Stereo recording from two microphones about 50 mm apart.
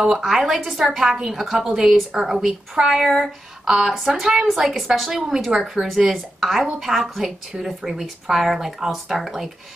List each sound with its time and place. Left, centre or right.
0.0 s a woman's voice: centre
1.4 s a woman's voice: centre